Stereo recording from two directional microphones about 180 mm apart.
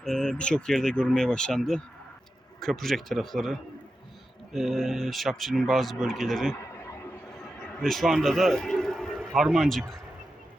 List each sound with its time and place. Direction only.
0.0 s speech: 5° left (ahead or behind)
6.7 s a sound: 15° left (ahead or behind)
7.4 s a man's voice: centre (ahead or behind)